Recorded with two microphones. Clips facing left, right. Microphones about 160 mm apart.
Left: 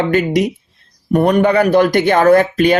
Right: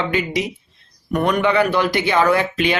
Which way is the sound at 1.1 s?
35° left (ahead or behind).